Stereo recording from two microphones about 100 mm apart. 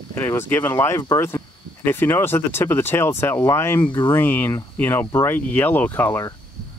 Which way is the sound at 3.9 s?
50° left (ahead or behind).